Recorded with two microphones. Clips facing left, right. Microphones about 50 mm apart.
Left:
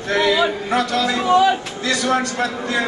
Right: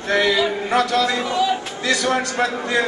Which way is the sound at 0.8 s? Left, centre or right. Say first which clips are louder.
Right 1 dB; centre.